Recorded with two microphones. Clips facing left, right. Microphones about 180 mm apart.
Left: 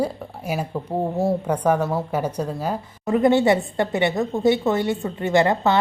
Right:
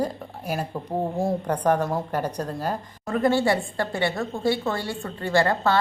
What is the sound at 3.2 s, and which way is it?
A woman's voice, 20° left (ahead or behind).